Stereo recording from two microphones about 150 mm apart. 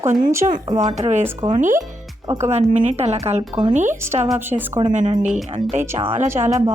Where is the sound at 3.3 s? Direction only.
40° right (ahead or behind).